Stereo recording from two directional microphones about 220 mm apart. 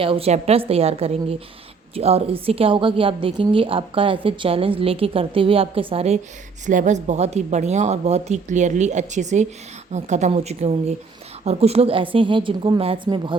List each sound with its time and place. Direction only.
0.0 s a woman's voice: 25° right (ahead or behind)